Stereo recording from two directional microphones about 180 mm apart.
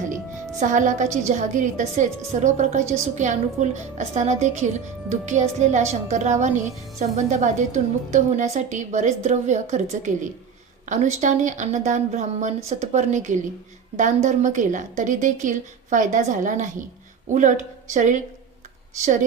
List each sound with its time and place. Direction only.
0.6 s a woman's voice: 45° right (ahead or behind)